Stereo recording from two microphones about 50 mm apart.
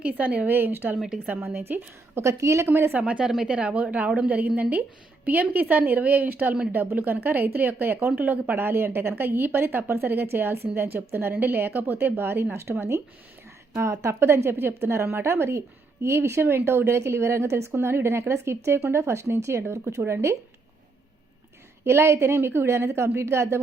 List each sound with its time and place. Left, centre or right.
0.0 s speech: right
0.4 s speech: right
0.9 s a woman's voice: centre
1.5 s speech: right
2.2 s a woman's voice: right
3.0 s a woman's voice: right
13.7 s a woman's voice: right
14.2 s speech: right
17.7 s speech: right
20.0 s speech: right
21.8 s speech: right